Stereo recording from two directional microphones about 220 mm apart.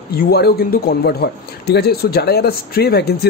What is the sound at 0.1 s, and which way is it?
Speech, 45° left (ahead or behind).